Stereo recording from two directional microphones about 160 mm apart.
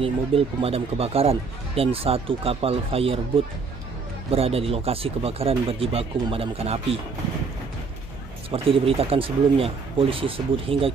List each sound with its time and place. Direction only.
0.0 s speech: 35° right (ahead or behind)
8.5 s speech: 35° right (ahead or behind)